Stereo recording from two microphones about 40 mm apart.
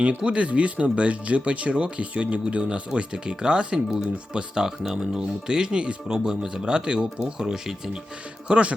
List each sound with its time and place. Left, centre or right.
0.2 s speech: right
6.1 s speech: centre